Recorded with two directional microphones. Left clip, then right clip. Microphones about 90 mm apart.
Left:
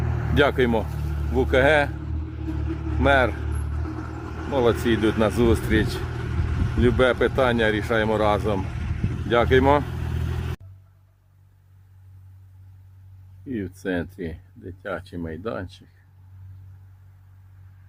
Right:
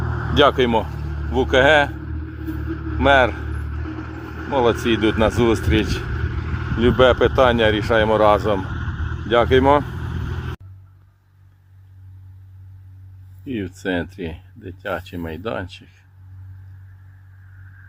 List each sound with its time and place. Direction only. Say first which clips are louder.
0.0 s vehicle: right 4 dB; 10° right (ahead or behind)
0.3 s speech: right 5 dB; 10° left (ahead or behind)
0.9 s vehicle: right 3 dB; 10° right (ahead or behind)
1.4 s vehicle: right 4 dB; 5° left (ahead or behind)
3.0 s speech: right 5 dB; 5° left (ahead or behind)
3.3 s vehicle: right 3 dB; 5° right (ahead or behind)
4.5 s speech: right 3 dB; 15° left (ahead or behind)
6.0 s vehicle: right 3 dB; 5° right (ahead or behind)
7.0 s speech: right 7 dB; 5° left (ahead or behind)
8.5 s vehicle: right 5 dB; 15° right (ahead or behind)
9.3 s speech: right 4 dB; 10° left (ahead or behind)
9.9 s vehicle: right 2 dB; 15° right (ahead or behind)
13.5 s speech: right 4 dB; centre (ahead or behind)